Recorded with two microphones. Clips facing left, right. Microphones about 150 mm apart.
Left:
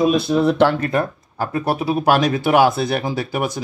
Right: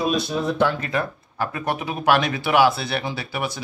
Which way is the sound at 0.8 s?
40° left (ahead or behind).